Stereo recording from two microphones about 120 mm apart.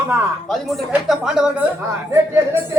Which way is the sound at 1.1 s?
5° right (ahead or behind).